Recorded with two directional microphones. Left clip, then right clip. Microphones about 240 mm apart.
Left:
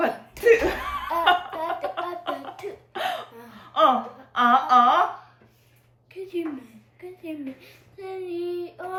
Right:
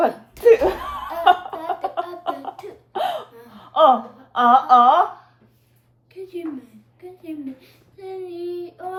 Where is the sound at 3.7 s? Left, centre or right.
Centre.